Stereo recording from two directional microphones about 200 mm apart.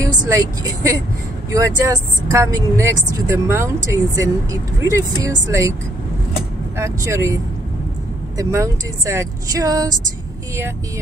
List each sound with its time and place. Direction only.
0.0 s speech: 15° right (ahead or behind)
6.8 s speech: 15° right (ahead or behind)
8.4 s speech: 15° right (ahead or behind)